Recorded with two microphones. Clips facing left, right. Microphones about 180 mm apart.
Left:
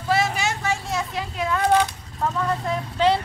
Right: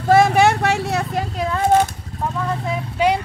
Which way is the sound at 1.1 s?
40° right (ahead or behind).